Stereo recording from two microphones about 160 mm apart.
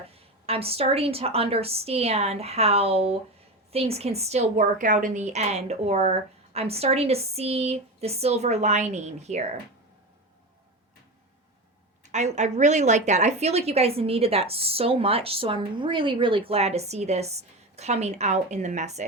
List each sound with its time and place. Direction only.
0.1 s a woman's voice: 40° right (ahead or behind)
12.1 s a woman's voice: 45° right (ahead or behind)